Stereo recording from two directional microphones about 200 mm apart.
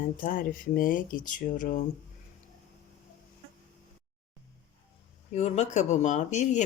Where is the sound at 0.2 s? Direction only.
45° left (ahead or behind).